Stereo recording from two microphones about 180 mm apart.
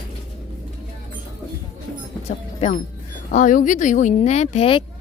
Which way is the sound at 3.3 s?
45° left (ahead or behind).